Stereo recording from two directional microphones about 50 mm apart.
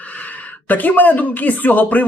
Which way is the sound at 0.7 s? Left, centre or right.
Left.